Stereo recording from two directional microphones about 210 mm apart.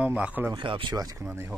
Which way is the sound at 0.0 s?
5° right (ahead or behind).